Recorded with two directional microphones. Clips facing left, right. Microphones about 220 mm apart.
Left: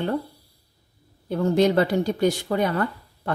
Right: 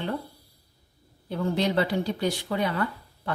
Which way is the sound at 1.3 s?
45° left (ahead or behind).